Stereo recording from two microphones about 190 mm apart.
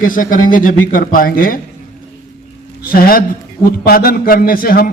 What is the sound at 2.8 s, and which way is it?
A man's voice, 50° left (ahead or behind).